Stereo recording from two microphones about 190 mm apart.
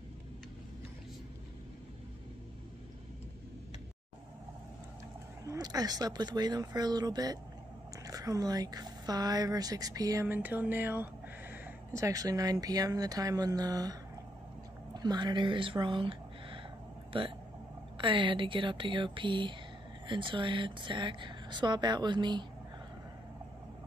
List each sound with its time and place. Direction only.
5.5 s speech: 20° right (ahead or behind)
15.0 s speech: 20° right (ahead or behind)